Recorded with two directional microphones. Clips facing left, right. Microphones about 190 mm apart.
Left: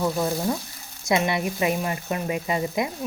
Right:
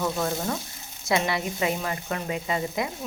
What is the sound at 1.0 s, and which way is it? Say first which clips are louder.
A woman's voice: left 3 dB; 20° left (ahead or behind).